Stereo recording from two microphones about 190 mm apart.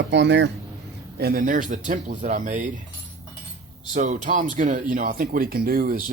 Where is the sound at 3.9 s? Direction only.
40° right (ahead or behind).